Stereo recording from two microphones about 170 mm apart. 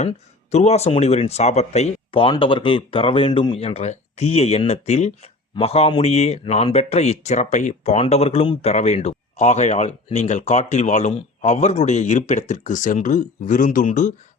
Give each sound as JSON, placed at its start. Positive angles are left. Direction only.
{"t": 0.5, "sound": "speech", "side_deg": 40}